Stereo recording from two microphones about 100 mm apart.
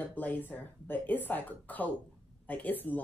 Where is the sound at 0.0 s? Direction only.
15° left (ahead or behind).